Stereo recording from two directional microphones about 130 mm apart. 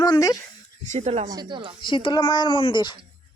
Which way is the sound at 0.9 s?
60° right (ahead or behind).